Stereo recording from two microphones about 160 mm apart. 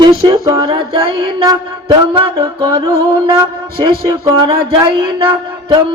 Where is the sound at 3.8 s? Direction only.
30° right (ahead or behind).